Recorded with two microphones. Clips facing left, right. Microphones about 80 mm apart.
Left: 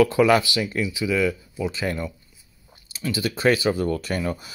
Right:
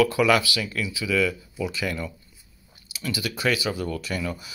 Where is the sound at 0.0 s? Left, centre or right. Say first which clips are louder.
Left 3 dB; left.